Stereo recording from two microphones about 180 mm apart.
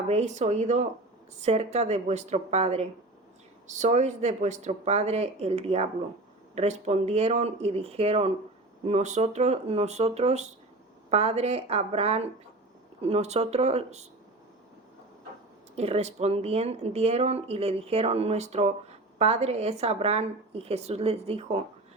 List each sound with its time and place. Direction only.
0.1 s speech: 40° right (ahead or behind)
15.7 s speech: 35° right (ahead or behind)